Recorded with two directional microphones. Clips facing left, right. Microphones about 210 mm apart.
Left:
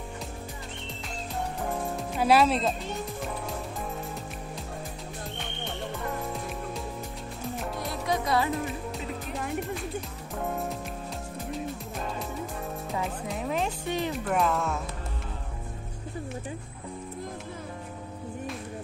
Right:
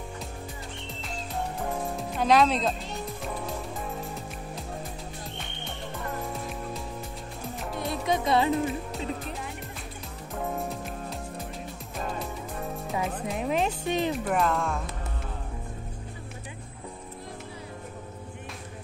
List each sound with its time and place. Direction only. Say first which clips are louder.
1.6 s music: left 1 dB; centre (ahead or behind)
7.5 s music: right 2 dB; centre (ahead or behind)
7.9 s music: right 3 dB; 20° right (ahead or behind)
10.3 s music: even; centre (ahead or behind)
13.4 s speech: right 3 dB; 20° right (ahead or behind)
14.2 s speech: even; centre (ahead or behind)